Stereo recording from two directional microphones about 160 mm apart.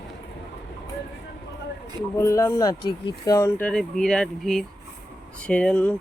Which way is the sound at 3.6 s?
5° left (ahead or behind).